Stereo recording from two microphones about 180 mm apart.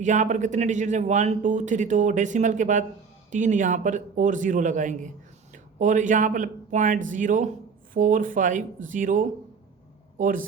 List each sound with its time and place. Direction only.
0.0 s a man's voice: 40° right (ahead or behind)